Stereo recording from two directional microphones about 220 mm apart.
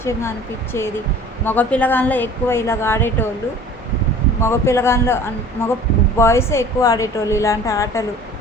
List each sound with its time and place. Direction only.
0.0 s a woman's voice: 10° left (ahead or behind)
4.4 s a woman's voice: 10° left (ahead or behind)